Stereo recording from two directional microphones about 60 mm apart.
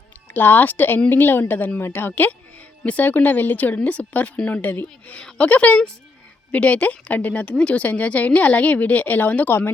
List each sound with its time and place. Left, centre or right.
0.3 s speech: left
5.1 s speech: centre